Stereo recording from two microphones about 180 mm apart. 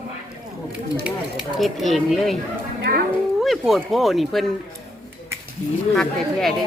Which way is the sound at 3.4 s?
Centre (ahead or behind).